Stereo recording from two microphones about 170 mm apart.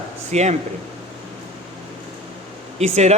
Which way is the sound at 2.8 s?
40° right (ahead or behind).